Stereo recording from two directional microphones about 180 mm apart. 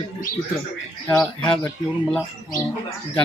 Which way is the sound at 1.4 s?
5° left (ahead or behind).